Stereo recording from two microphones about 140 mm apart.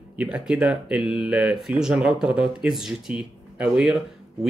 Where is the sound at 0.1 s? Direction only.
10° right (ahead or behind).